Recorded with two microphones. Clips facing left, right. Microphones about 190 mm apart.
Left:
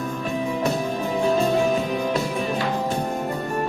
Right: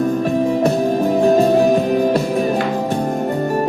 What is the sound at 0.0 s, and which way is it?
Music, 40° right (ahead or behind).